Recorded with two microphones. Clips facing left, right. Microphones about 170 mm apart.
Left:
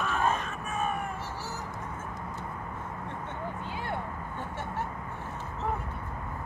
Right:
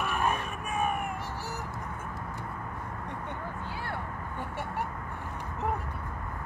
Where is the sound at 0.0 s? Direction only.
15° right (ahead or behind).